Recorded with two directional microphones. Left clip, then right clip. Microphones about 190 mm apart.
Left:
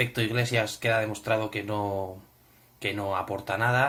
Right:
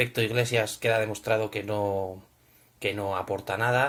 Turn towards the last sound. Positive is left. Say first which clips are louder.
# even
turn(degrees=-20)  # may be behind; listen again after turning